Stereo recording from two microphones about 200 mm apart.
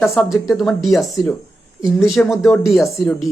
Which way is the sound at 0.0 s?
Centre (ahead or behind).